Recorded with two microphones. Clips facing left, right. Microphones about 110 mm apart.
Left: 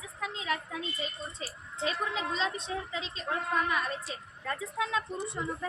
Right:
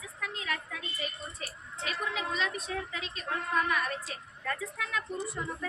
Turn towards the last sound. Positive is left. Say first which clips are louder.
# left 1 dB
turn(degrees=25)  # may be behind; listen again after turning